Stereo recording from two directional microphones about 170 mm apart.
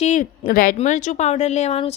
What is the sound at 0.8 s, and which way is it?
Speech, 45° left (ahead or behind).